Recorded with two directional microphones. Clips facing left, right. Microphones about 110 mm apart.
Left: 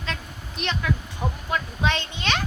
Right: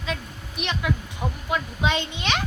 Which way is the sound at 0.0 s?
10° right (ahead or behind).